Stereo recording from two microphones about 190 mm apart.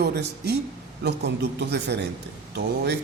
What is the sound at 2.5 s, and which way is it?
Speech, 60° right (ahead or behind).